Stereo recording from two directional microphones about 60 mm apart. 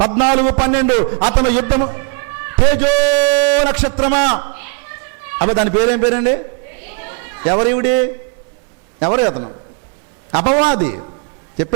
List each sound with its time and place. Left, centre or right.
0.4 s a man's voice: centre
10.3 s a man's voice: centre